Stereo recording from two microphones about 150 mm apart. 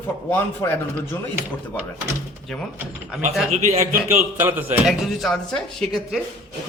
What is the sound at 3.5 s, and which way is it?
Speech, 50° right (ahead or behind).